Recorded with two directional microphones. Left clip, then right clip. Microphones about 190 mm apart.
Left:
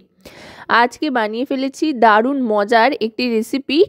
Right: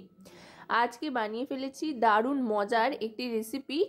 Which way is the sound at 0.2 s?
45° left (ahead or behind).